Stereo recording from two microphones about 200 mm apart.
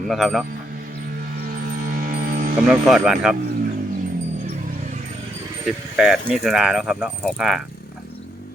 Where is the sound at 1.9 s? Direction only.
45° right (ahead or behind).